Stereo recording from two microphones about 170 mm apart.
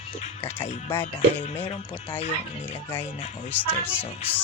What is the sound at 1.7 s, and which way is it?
Speech, 35° left (ahead or behind).